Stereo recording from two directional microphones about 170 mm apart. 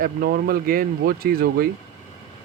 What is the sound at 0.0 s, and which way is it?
Speech, 65° right (ahead or behind).